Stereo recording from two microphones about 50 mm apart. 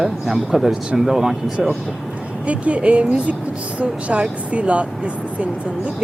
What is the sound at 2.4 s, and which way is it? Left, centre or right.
Speech, right.